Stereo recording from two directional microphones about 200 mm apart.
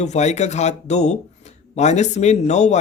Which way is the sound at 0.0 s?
35° left (ahead or behind).